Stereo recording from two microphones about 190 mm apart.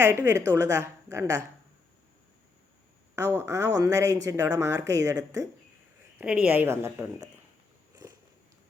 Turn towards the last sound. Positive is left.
turn(degrees=-15)  # may be behind; listen again after turning